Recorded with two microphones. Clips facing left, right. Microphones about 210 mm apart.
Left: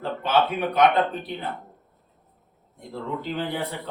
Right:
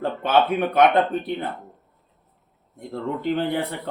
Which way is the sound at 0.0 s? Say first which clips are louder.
Right 3 dB; 50° right (ahead or behind).